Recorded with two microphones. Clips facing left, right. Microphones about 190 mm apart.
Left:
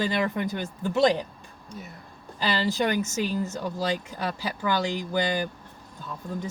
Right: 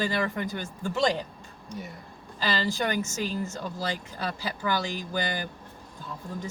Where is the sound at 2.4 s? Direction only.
15° left (ahead or behind).